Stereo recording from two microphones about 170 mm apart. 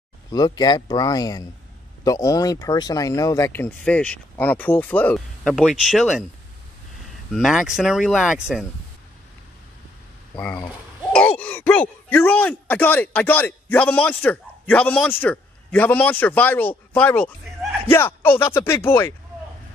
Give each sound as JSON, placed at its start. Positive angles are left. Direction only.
{"t": 0.3, "sound": "speech", "side_deg": 25}
{"t": 5.4, "sound": "speech", "side_deg": -5}
{"t": 7.2, "sound": "speech", "side_deg": 0}
{"t": 11.1, "sound": "speech", "side_deg": 10}